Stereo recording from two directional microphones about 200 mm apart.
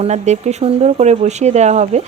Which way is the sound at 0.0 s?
35° right (ahead or behind).